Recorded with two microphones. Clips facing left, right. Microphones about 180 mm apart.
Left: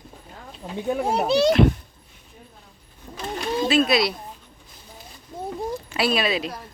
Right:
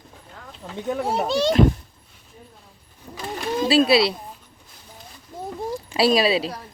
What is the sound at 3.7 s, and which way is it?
Speech, 30° right (ahead or behind).